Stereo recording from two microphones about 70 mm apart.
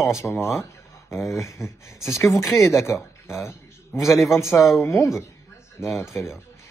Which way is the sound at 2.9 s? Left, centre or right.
Left.